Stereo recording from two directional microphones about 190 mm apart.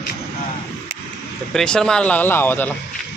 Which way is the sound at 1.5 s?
5° left (ahead or behind).